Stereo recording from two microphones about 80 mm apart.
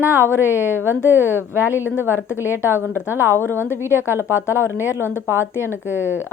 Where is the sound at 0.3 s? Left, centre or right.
Left.